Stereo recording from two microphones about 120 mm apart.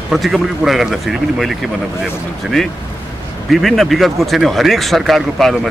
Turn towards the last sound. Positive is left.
turn(degrees=0)  # may be behind; listen again after turning